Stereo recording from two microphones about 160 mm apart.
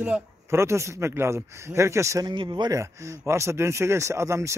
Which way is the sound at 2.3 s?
30° right (ahead or behind).